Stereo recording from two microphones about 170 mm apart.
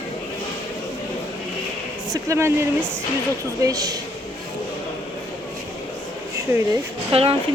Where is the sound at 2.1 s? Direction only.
15° right (ahead or behind).